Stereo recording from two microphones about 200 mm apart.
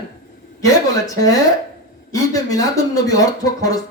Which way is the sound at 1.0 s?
15° left (ahead or behind).